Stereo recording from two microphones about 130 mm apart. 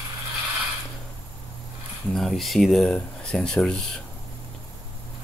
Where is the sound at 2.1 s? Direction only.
Centre (ahead or behind).